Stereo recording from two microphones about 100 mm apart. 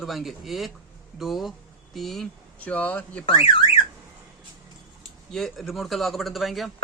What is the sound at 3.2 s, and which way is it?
Speech, 65° left (ahead or behind).